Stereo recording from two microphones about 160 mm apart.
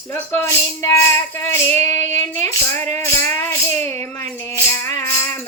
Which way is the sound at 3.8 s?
15° left (ahead or behind).